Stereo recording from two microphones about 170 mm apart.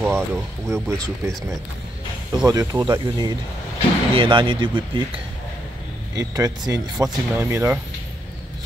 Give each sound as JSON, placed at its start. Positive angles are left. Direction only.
{"t": 0.0, "sound": "speech", "side_deg": -15}
{"t": 6.1, "sound": "speech", "side_deg": -20}